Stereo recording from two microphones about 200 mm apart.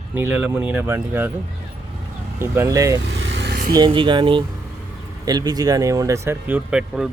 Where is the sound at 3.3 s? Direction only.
60° right (ahead or behind).